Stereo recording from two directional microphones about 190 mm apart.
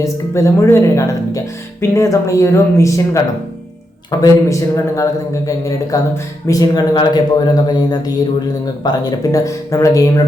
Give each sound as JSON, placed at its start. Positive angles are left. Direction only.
{"t": 0.0, "sound": "a man's voice", "side_deg": 15}